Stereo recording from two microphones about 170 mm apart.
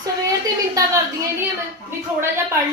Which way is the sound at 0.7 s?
15° right (ahead or behind).